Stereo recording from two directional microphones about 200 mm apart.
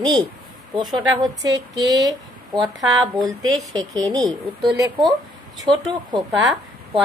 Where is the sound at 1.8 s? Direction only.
20° right (ahead or behind).